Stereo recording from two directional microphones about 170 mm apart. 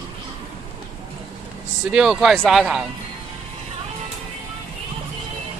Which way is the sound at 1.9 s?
5° right (ahead or behind).